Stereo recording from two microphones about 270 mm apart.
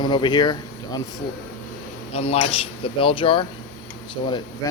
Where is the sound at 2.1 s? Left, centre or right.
Left.